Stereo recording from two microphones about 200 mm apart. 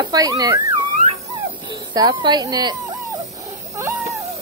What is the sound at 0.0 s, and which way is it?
Speech, 20° right (ahead or behind).